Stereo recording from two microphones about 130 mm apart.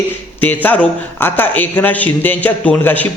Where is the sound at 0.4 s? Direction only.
15° left (ahead or behind).